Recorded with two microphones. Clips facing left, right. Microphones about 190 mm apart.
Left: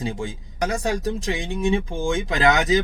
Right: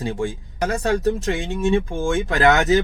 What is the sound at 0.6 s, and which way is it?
Speech, 15° left (ahead or behind).